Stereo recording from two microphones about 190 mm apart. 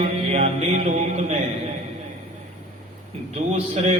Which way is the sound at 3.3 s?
35° right (ahead or behind).